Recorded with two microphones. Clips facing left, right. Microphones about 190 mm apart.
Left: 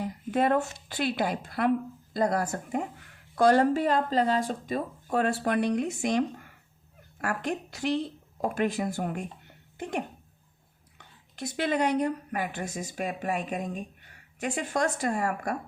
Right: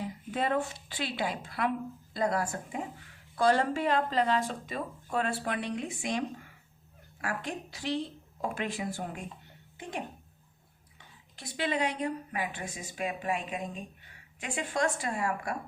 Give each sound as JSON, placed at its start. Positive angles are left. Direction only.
{"t": 0.0, "sound": "a woman's voice", "side_deg": 50}
{"t": 10.9, "sound": "speech", "side_deg": 45}